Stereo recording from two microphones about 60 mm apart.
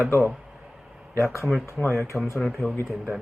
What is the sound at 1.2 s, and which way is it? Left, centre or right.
Speech, left.